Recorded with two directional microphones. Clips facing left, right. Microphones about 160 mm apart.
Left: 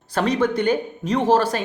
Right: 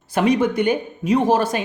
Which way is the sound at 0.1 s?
10° right (ahead or behind).